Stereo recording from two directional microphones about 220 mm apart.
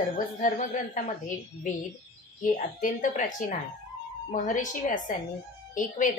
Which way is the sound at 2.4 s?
35° left (ahead or behind).